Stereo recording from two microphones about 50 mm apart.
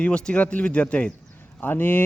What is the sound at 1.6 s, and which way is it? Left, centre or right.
Speech, left.